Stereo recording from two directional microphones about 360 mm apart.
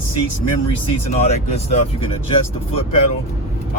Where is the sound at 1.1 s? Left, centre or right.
Centre.